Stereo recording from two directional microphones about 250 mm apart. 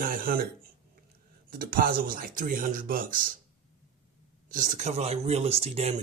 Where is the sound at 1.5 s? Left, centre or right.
Right.